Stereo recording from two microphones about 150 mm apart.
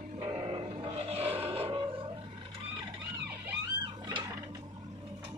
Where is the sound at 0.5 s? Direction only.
45° right (ahead or behind).